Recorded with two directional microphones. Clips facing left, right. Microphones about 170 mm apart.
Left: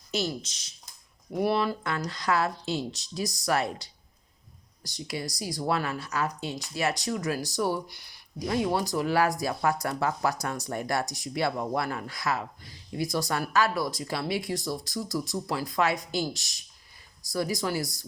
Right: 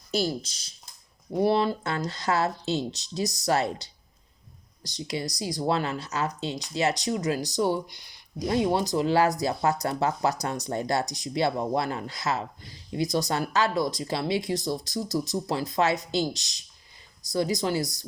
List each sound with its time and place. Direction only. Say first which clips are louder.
0.1 s speech: right 3 dB; 35° right (ahead or behind)